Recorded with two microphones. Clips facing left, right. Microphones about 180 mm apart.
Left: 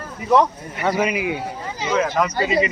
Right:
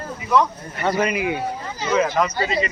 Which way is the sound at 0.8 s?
5° left (ahead or behind).